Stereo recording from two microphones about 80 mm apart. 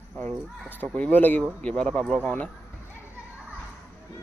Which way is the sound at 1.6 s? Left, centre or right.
Centre.